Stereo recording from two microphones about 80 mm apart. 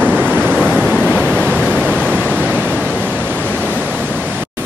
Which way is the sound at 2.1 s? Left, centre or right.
Centre.